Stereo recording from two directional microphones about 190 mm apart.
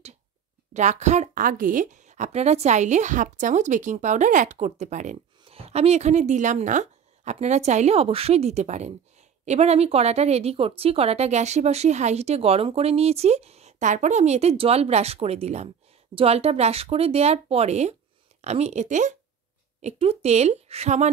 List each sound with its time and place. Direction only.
0.7 s a woman's voice: 40° right (ahead or behind)